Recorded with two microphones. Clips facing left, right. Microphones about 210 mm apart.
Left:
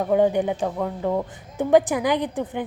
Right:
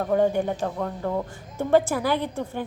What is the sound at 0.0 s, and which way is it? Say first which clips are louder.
A woman's voice: left 2 dB; 15° left (ahead or behind).